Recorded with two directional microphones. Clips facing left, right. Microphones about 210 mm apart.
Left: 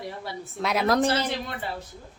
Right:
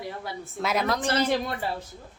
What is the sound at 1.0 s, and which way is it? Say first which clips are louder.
Speech: right 1 dB; 50° right (ahead or behind).